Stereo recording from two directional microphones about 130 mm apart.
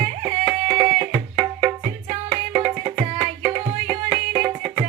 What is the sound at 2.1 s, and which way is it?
Music, 35° right (ahead or behind).